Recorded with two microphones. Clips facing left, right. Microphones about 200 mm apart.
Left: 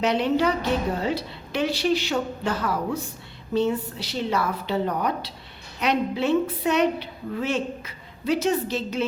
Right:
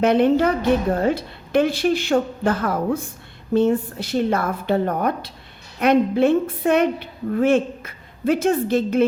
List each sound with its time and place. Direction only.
0.0 s a woman's voice: 50° right (ahead or behind)